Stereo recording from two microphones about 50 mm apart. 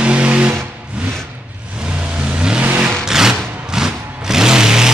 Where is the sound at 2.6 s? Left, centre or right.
Right.